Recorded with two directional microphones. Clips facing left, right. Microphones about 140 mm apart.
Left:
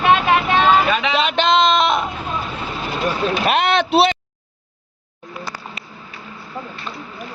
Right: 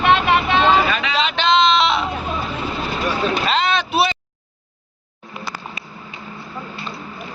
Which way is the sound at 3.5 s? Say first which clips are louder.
Left 3 dB; 60° left (ahead or behind).